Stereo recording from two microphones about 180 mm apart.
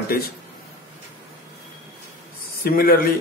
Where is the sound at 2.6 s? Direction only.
55° left (ahead or behind).